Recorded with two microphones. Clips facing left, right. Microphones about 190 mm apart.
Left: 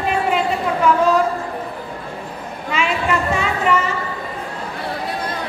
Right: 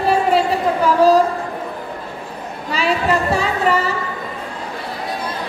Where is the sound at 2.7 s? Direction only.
35° right (ahead or behind).